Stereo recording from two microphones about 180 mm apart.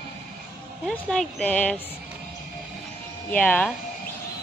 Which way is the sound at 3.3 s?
10° left (ahead or behind).